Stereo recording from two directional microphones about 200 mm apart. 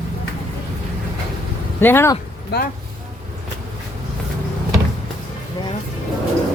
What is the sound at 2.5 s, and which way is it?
Speech, 55° left (ahead or behind).